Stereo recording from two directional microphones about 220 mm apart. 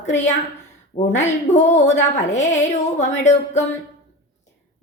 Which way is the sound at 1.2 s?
30° left (ahead or behind).